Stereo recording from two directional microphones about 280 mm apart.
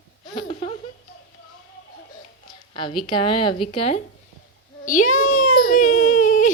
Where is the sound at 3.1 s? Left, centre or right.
Centre.